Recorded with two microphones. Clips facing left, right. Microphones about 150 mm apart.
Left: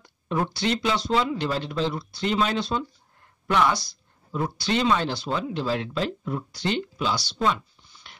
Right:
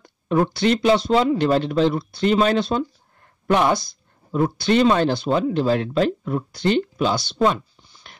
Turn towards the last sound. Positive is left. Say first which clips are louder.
# right 5 dB
turn(degrees=-50)  # may be behind; listen again after turning